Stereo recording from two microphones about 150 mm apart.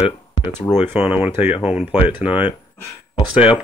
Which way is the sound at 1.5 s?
45° left (ahead or behind).